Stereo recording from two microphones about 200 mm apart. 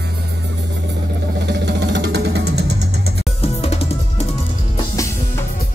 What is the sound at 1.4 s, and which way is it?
Music, 60° right (ahead or behind).